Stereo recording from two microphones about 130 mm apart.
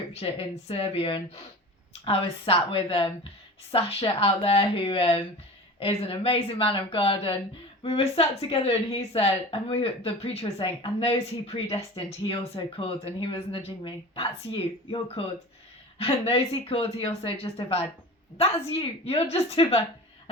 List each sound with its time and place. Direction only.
0.1 s a woman's voice: 50° left (ahead or behind)